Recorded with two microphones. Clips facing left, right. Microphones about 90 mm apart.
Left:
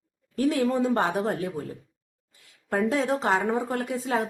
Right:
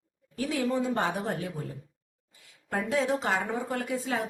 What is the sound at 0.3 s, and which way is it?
A woman's voice, 40° left (ahead or behind).